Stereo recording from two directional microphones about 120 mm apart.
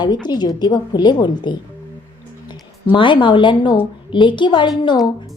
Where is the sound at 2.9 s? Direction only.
40° left (ahead or behind).